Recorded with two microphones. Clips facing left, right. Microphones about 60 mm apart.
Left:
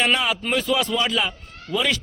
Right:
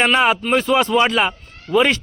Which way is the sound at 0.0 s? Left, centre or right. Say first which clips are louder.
Right 6 dB; right.